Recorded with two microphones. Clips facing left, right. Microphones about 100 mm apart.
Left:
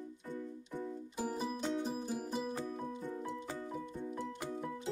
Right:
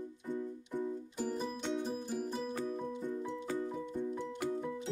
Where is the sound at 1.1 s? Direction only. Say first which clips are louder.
Left 1 dB; 10° left (ahead or behind).